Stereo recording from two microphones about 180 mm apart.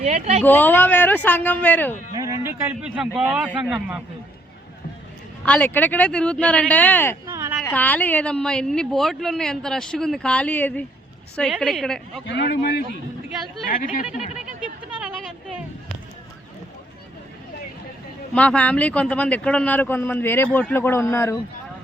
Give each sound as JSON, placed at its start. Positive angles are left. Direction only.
{"t": 0.0, "sound": "speech", "side_deg": -35}
{"t": 0.4, "sound": "a man's voice", "side_deg": 10}
{"t": 2.1, "sound": "a man's voice", "side_deg": -20}
{"t": 5.5, "sound": "a man's voice", "side_deg": 10}
{"t": 7.3, "sound": "a sound", "side_deg": -15}
{"t": 7.6, "sound": "speech", "side_deg": 10}
{"t": 12.2, "sound": "speech", "side_deg": 70}
{"t": 13.7, "sound": "speech", "side_deg": 50}
{"t": 15.0, "sound": "a sound", "side_deg": 0}
{"t": 18.3, "sound": "a man's voice", "side_deg": 5}